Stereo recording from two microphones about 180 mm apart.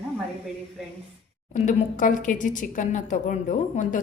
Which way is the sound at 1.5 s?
45° left (ahead or behind).